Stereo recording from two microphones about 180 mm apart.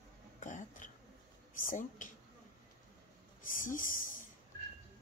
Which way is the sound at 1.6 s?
45° left (ahead or behind).